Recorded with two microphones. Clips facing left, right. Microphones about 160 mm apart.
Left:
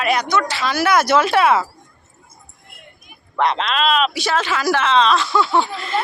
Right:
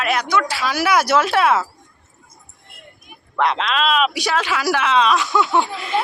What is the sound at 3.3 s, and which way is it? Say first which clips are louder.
Speech: even; 5° right (ahead or behind).